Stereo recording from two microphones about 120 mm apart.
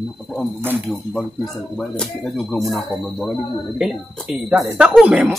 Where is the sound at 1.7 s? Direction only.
5° left (ahead or behind).